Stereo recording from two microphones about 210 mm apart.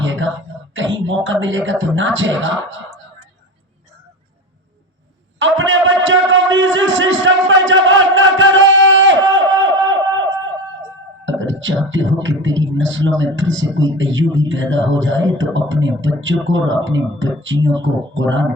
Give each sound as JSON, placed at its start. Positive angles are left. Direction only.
{"t": 0.0, "sound": "throat clearing", "side_deg": -65}
{"t": 0.7, "sound": "a man's voice", "side_deg": -65}
{"t": 5.4, "sound": "a man's voice", "side_deg": -65}
{"t": 9.3, "sound": "a sound", "side_deg": -65}
{"t": 11.3, "sound": "a man's voice", "side_deg": -65}